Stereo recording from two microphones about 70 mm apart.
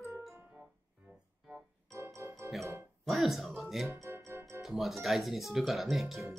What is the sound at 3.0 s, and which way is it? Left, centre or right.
Speech, centre.